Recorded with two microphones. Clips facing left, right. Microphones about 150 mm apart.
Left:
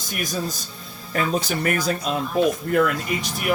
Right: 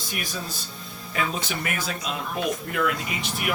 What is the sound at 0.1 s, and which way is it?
Speech, 45° left (ahead or behind).